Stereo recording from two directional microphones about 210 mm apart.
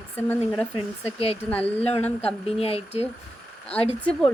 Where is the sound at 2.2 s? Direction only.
30° left (ahead or behind).